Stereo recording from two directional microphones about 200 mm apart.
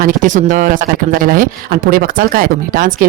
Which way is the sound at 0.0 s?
40° right (ahead or behind).